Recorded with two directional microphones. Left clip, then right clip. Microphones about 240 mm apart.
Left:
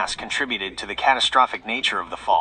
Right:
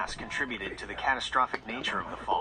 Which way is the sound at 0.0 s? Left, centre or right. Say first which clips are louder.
Left 8 dB; left.